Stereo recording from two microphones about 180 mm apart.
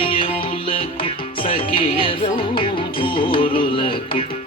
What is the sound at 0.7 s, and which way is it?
Music, 30° left (ahead or behind).